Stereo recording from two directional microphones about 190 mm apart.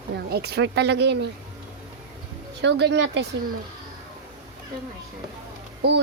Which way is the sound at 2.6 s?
65° right (ahead or behind).